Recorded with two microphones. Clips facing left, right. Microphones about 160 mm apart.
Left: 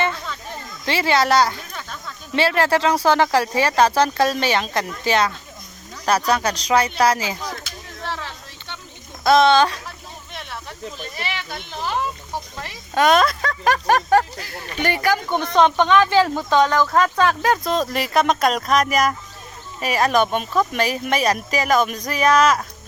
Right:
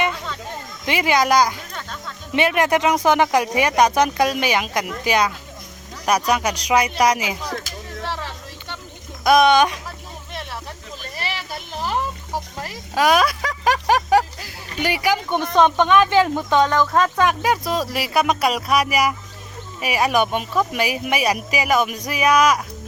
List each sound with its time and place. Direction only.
0.9 s speech: 15° right (ahead or behind)
9.2 s speech: 15° right (ahead or behind)
11.3 s a sound: 5° right (ahead or behind)
15.9 s speech: 20° right (ahead or behind)